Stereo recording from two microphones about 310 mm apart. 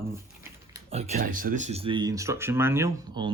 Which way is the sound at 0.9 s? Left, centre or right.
Right.